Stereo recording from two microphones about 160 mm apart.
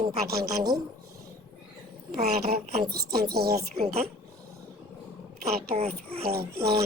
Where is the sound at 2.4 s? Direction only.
80° right.